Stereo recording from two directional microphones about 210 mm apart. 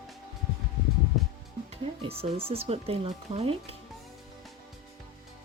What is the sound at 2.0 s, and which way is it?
Speech, 25° right (ahead or behind).